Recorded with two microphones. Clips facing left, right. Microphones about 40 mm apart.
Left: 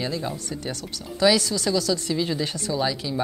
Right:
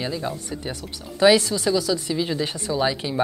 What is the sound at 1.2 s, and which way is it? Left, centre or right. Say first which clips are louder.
Speech: right 3 dB; right.